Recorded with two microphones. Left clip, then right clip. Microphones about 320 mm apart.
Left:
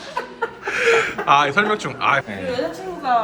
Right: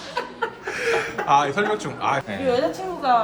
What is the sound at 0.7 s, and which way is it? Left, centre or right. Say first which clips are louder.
Speech: left 7 dB; centre.